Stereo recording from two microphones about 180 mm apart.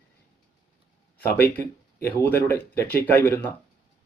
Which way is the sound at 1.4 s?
10° left (ahead or behind).